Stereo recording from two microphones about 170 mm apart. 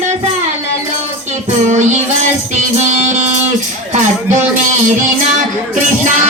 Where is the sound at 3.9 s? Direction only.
45° right (ahead or behind).